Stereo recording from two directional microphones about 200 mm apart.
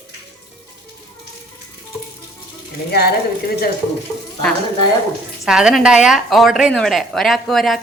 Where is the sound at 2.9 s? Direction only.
50° left (ahead or behind).